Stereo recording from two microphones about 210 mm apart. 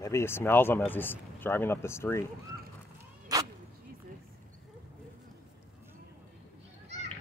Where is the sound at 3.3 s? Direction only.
20° right (ahead or behind).